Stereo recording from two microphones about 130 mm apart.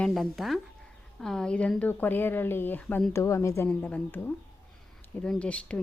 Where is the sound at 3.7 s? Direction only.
10° left (ahead or behind).